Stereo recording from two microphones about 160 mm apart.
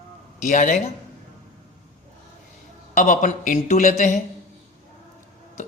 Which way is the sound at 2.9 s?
50° left (ahead or behind).